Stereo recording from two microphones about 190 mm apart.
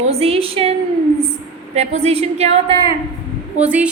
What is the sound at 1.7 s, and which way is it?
A woman's voice, 35° right (ahead or behind).